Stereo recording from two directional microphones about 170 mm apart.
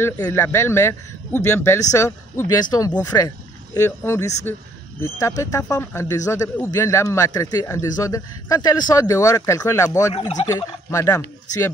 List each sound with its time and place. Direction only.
0.0 s a man's voice: 15° left (ahead or behind)
10.1 s turkey: 35° left (ahead or behind)
10.4 s a man's voice: 25° left (ahead or behind)